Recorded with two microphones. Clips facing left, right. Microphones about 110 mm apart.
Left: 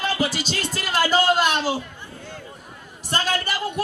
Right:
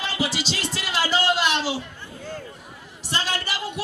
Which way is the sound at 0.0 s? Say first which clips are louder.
Left 3 dB; 45° left (ahead or behind).